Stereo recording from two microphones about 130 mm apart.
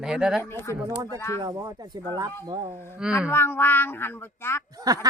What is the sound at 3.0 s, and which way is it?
Speech, 5° right (ahead or behind).